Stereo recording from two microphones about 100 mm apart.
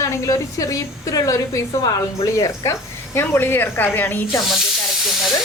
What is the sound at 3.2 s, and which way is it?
A woman's voice, 20° left (ahead or behind).